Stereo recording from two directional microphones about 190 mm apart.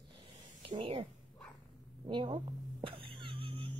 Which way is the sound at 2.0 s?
25° right (ahead or behind).